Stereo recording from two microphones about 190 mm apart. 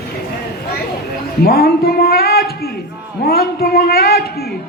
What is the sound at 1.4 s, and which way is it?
A man's voice, 55° left (ahead or behind).